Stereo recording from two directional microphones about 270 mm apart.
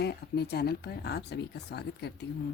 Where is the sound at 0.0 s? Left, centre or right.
Left.